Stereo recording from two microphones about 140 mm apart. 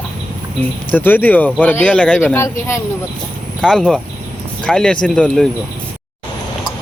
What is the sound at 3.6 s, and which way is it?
Speech, 5° left (ahead or behind).